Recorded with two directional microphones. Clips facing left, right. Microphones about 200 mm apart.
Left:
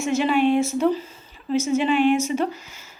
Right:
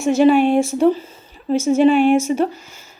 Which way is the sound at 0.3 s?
45° right (ahead or behind).